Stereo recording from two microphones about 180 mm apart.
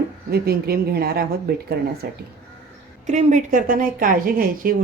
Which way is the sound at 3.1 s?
45° right (ahead or behind).